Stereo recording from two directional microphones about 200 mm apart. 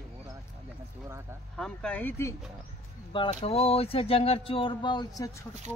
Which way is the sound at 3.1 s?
25° left (ahead or behind).